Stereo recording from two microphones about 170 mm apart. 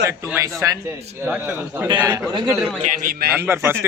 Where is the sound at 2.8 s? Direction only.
60° right (ahead or behind).